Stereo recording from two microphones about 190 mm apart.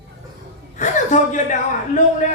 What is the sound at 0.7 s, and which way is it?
Speech, 40° left (ahead or behind).